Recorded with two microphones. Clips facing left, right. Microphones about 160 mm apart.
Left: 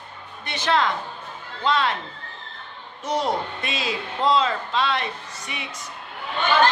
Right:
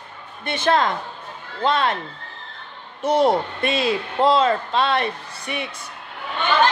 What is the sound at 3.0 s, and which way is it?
A man's voice, 55° right (ahead or behind).